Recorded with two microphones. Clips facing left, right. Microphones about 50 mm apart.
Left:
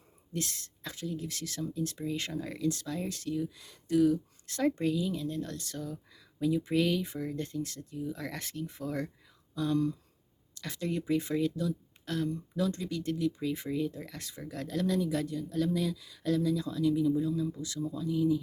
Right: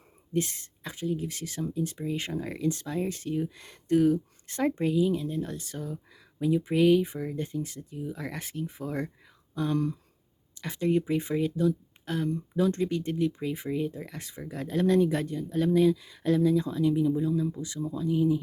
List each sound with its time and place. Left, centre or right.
0.3 s speech: right
4.5 s speech: right
9.6 s speech: right
10.5 s speech: right
12.7 s speech: right
13.4 s speech: centre
14.8 s speech: right